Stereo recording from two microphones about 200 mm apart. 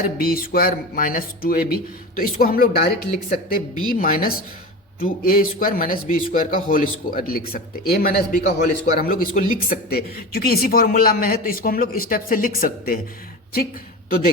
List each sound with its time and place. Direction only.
0.2 s speech: 45° left (ahead or behind)